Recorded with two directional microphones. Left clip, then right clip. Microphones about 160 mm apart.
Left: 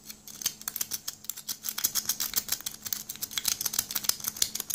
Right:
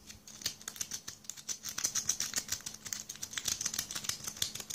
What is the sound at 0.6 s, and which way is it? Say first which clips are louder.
Typing: left 5 dB; 15° left (ahead or behind).